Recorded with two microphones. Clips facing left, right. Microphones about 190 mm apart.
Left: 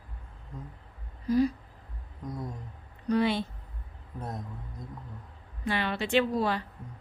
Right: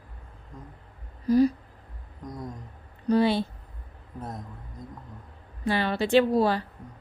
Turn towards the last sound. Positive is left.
turn(degrees=-35)  # may be behind; listen again after turning